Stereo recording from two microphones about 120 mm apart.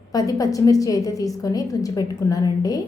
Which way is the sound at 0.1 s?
30° left (ahead or behind).